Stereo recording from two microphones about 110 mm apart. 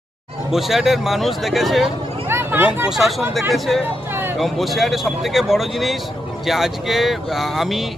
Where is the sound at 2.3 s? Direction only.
20° right (ahead or behind).